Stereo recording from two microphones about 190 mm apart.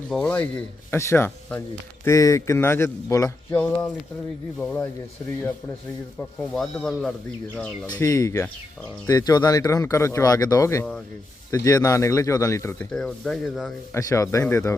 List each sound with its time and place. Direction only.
0.1 s speech: 5° left (ahead or behind)
6.5 s speech: 5° left (ahead or behind)
12.9 s speech: 5° left (ahead or behind)
13.9 s speech: 15° left (ahead or behind)